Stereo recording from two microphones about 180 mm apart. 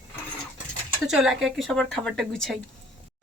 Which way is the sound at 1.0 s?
5° right (ahead or behind).